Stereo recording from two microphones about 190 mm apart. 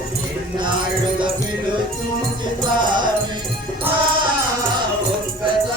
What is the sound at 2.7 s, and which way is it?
Music, 25° right (ahead or behind).